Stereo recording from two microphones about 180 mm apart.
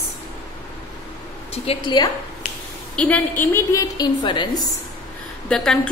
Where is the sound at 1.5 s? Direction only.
35° left (ahead or behind).